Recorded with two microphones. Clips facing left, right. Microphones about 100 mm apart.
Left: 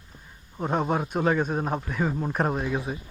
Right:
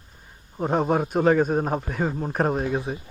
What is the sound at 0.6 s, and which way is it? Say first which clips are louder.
A man's voice: right 3 dB; 35° right (ahead or behind).